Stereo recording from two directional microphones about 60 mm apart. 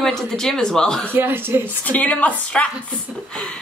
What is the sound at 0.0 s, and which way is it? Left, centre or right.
Speech, centre.